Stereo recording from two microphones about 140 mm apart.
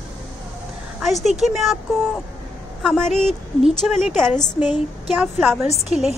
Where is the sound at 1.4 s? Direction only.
Centre (ahead or behind).